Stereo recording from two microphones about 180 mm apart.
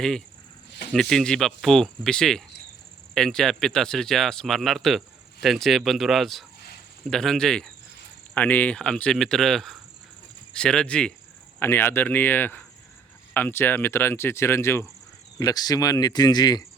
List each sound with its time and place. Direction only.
0.9 s speech: 5° left (ahead or behind); by 16.6 s 20° left (ahead or behind)